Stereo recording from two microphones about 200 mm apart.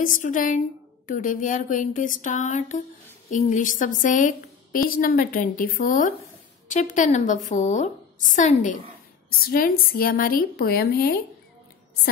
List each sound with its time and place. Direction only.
0.0 s a woman's voice: 40° left (ahead or behind)
9.5 s speech: 45° left (ahead or behind)